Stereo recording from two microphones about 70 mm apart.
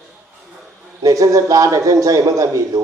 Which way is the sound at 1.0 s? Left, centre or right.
Right.